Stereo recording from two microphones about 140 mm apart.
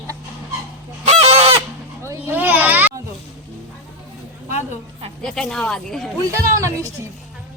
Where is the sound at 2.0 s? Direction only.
20° right (ahead or behind).